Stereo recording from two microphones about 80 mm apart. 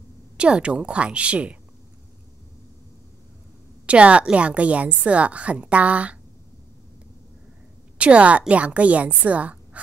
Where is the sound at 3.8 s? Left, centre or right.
Centre.